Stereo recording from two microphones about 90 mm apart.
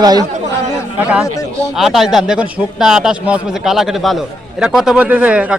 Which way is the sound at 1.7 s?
Centre (ahead or behind).